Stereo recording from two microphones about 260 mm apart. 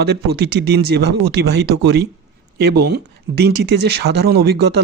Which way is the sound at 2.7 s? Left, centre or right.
Right.